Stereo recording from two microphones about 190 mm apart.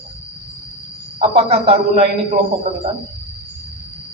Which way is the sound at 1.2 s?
30° right (ahead or behind).